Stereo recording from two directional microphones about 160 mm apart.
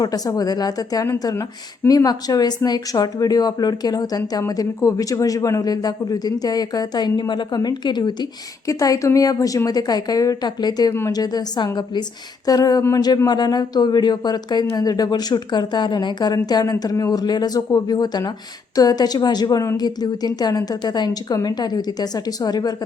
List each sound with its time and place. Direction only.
0.0 s a woman's voice: 25° left (ahead or behind)